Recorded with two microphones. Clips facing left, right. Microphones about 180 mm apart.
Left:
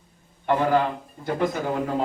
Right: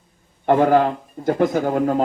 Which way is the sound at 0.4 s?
50° right (ahead or behind).